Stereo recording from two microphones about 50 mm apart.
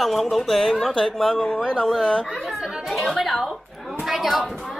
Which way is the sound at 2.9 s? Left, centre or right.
Centre.